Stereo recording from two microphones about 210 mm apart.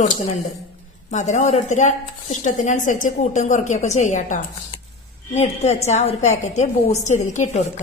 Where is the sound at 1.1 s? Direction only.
35° left (ahead or behind).